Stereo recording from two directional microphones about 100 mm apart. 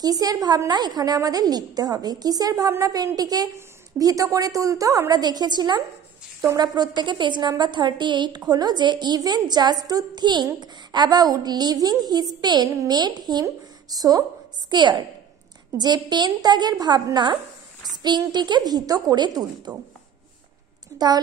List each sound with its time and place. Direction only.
0.0 s a woman's voice: 40° right (ahead or behind)
17.9 s a sound: 45° right (ahead or behind)
18.3 s a woman's voice: 45° right (ahead or behind)